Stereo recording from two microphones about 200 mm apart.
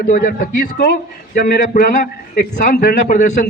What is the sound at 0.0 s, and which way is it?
A man's voice, 45° left (ahead or behind).